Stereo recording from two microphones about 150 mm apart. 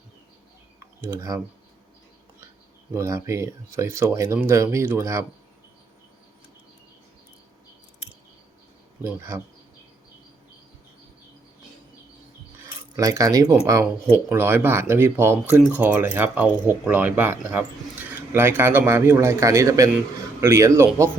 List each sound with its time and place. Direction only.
0.8 s typing: 15° right (ahead or behind)
2.9 s speech: 20° right (ahead or behind)
9.0 s speech: 15° right (ahead or behind)
12.6 s speech: 25° right (ahead or behind)